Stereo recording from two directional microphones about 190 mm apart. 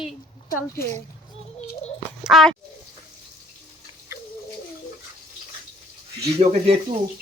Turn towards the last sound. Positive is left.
turn(degrees=-30)  # may be behind; listen again after turning